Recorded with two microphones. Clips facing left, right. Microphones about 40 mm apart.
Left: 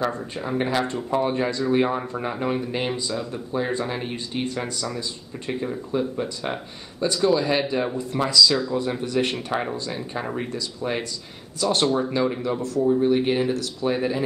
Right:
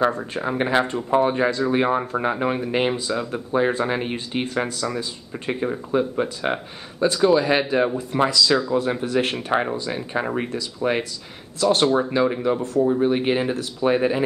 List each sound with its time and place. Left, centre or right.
0.2 s speech: right
11.7 s speech: centre